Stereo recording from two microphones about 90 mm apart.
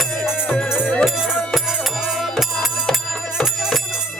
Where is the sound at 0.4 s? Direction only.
10° left (ahead or behind).